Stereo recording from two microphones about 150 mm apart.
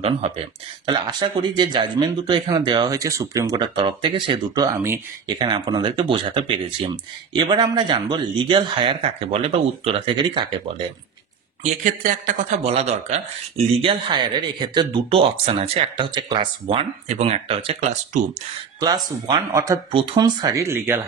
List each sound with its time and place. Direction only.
0.8 s speech: 30° right (ahead or behind)
5.7 s speech: 35° right (ahead or behind)
11.6 s speech: 65° right (ahead or behind)
12.6 s speech: 45° right (ahead or behind)
13.7 s speech: 35° right (ahead or behind)
18.8 s speech: 25° right (ahead or behind)
19.9 s speech: 35° right (ahead or behind); by 21.0 s 15° right (ahead or behind)